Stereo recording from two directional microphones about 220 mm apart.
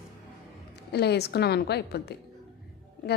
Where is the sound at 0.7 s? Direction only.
50° left (ahead or behind).